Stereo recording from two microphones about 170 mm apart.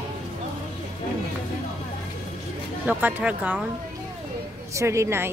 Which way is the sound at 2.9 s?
10° right (ahead or behind).